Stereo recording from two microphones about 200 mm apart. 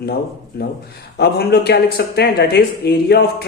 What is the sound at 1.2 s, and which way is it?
Speech, 55° left (ahead or behind).